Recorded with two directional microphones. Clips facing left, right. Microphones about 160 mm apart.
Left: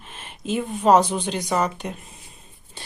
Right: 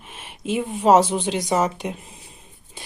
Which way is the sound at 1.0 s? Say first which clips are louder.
Right 2 dB; 25° right (ahead or behind).